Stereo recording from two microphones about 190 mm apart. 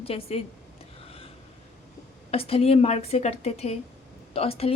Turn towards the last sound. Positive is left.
turn(degrees=30)  # may be behind; listen again after turning